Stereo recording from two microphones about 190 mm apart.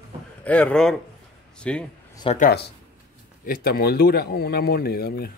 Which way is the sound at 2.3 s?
45° left (ahead or behind).